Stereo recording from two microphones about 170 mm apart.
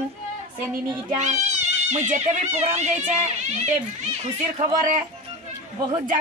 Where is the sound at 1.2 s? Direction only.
45° right (ahead or behind).